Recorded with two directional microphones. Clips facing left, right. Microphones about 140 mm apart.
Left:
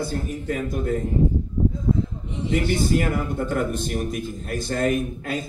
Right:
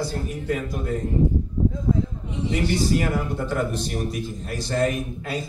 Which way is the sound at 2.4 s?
50° left (ahead or behind).